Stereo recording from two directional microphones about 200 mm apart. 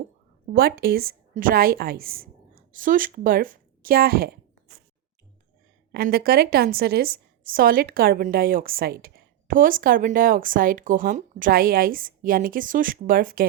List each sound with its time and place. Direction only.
0.4 s a woman's voice: 50° right (ahead or behind)
5.9 s a woman's voice: 50° right (ahead or behind)